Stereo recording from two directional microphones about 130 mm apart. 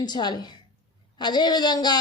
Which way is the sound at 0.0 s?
35° left (ahead or behind).